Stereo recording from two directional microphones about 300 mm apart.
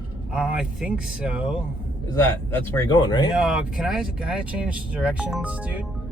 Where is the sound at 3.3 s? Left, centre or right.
Centre.